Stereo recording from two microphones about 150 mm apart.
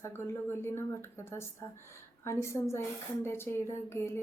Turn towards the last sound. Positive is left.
turn(degrees=15)  # may be behind; listen again after turning